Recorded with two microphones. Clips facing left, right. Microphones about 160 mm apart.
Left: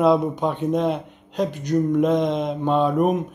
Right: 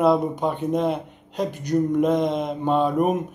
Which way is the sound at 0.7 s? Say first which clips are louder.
Left 1 dB; 5° right (ahead or behind).